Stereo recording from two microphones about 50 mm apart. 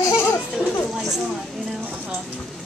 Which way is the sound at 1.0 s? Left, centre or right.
Centre.